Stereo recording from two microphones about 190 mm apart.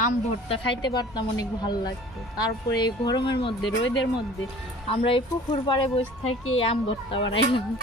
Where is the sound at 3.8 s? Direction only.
80° left.